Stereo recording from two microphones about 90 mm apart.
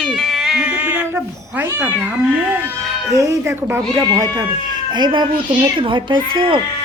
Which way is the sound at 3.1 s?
35° right (ahead or behind).